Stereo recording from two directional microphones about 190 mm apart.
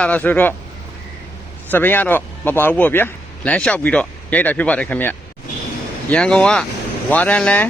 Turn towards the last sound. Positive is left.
turn(degrees=5)  # may be behind; listen again after turning